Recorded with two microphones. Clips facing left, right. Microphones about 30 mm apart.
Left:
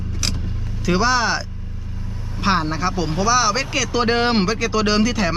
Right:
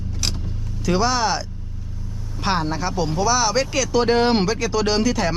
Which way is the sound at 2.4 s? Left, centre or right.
Centre.